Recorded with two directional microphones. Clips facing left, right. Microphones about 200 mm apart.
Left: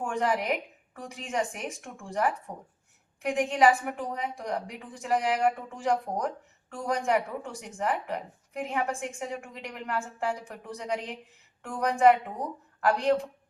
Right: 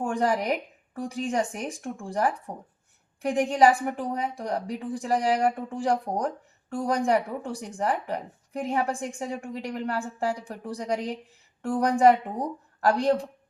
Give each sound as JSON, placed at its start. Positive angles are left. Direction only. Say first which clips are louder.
{"t": 0.0, "sound": "speech", "louder": "right 3 dB", "side_deg": -35}